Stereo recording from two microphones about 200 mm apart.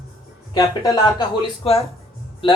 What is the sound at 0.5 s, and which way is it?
A man's voice, 20° left (ahead or behind).